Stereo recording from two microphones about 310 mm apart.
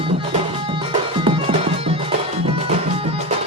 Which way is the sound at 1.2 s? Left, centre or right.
Centre.